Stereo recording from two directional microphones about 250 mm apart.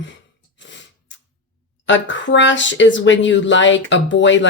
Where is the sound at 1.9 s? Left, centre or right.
Left.